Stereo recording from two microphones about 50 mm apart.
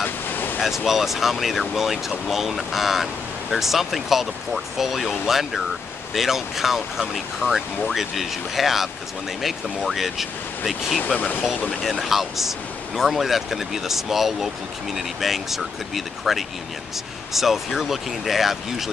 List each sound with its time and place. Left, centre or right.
0.0 s waves: left
0.6 s speech: centre